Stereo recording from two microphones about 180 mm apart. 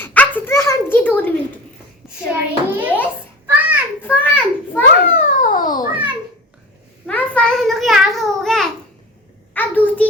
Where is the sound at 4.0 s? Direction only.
10° left (ahead or behind).